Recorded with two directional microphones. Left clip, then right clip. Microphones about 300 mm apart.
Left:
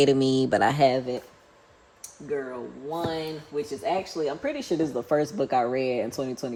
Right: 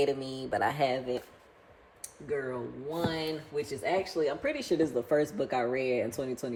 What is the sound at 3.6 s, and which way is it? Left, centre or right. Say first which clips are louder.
Speech: left 4 dB; centre.